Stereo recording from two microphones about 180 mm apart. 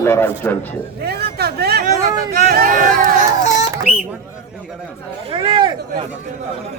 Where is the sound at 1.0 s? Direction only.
65° right (ahead or behind); by 3.1 s 50° right (ahead or behind).